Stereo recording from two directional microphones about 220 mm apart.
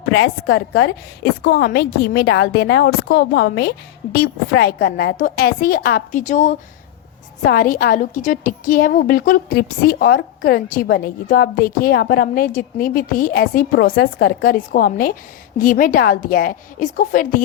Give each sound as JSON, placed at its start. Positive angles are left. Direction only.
{"t": 0.0, "sound": "a woman's voice", "side_deg": 55}